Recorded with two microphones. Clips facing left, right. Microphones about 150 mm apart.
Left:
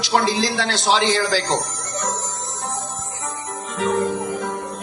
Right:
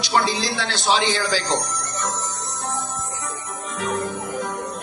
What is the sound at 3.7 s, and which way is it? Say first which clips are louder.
Music: left 5 dB; 90° left.